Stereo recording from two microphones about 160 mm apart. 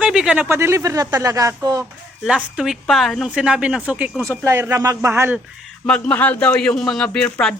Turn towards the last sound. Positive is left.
turn(degrees=5)  # may be behind; listen again after turning